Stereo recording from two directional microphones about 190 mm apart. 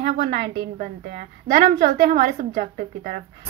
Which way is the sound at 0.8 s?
50° right (ahead or behind).